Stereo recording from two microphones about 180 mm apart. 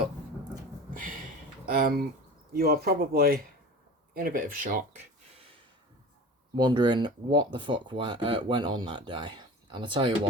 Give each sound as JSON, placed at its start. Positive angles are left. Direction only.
{"t": 1.6, "sound": "speech", "side_deg": -55}
{"t": 6.6, "sound": "speech", "side_deg": -25}